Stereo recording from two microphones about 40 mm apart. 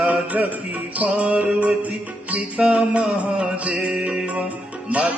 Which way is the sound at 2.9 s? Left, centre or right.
Right.